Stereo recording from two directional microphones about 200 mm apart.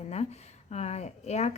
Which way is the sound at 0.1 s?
35° left (ahead or behind).